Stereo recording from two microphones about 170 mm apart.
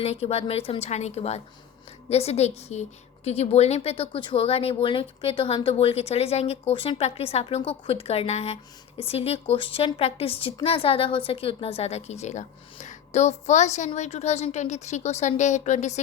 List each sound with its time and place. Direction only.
0.0 s a woman's voice: 35° left (ahead or behind)